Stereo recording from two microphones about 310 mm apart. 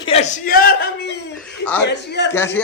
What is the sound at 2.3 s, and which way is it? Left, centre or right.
Speech, centre.